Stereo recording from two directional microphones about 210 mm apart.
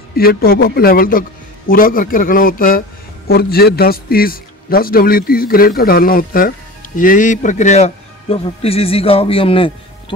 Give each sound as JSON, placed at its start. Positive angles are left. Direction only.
{"t": 0.2, "sound": "a man's voice", "side_deg": 45}